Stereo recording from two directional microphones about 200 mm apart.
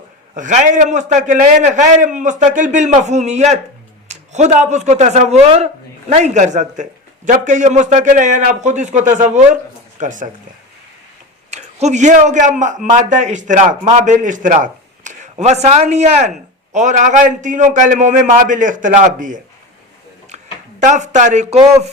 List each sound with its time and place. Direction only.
0.3 s a man's voice: 40° right (ahead or behind)
11.5 s a man's voice: 35° right (ahead or behind)